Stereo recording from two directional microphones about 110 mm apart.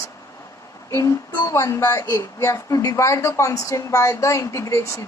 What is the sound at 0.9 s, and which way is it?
A woman's voice, 30° left (ahead or behind).